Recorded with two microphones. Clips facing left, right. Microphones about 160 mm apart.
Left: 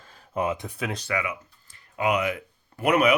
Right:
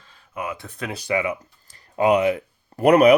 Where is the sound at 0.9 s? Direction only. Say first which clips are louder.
Right 9 dB; 10° right (ahead or behind).